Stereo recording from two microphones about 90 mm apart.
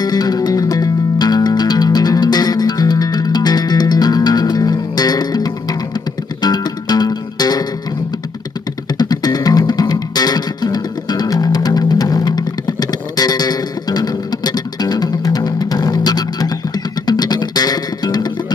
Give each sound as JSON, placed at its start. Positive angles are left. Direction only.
{"t": 0.0, "sound": "music", "side_deg": 45}
{"t": 8.9, "sound": "music", "side_deg": 50}